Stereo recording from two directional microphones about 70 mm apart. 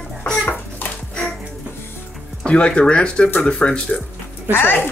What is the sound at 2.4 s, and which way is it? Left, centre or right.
Speech, centre.